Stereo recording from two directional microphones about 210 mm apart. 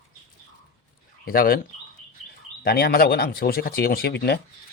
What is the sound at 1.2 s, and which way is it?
Speech, 45° left (ahead or behind).